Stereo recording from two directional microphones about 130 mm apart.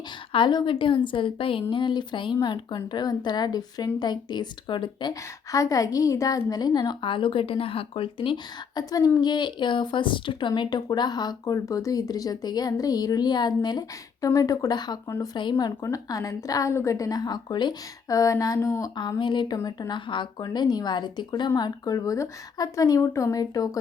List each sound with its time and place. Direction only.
0.3 s a woman's voice: 40° left (ahead or behind)
8.9 s a woman's voice: 25° left (ahead or behind)
18.9 s a woman's voice: 35° left (ahead or behind)
19.5 s a woman's voice: 25° left (ahead or behind)